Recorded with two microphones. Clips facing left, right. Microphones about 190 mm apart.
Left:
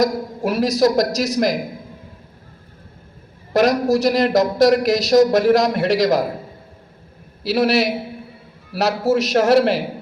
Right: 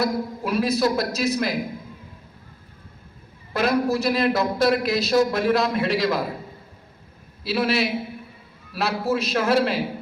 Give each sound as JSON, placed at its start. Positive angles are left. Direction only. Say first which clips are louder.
{"t": 0.0, "sound": "a man's voice", "louder": "left 5 dB", "side_deg": 40}
{"t": 3.5, "sound": "a man's voice", "louder": "left 6 dB", "side_deg": 40}
{"t": 7.4, "sound": "a man's voice", "louder": "left 5 dB", "side_deg": 45}